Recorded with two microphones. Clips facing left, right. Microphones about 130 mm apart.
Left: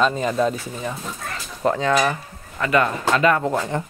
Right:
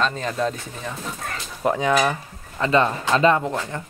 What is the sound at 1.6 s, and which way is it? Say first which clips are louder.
Cutlery: left 1 dB; 10° right (ahead or behind).